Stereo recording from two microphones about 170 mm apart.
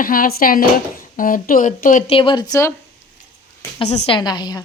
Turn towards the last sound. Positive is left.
turn(degrees=25)  # may be behind; listen again after turning